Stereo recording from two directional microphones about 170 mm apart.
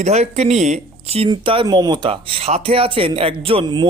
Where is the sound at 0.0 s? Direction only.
40° right (ahead or behind).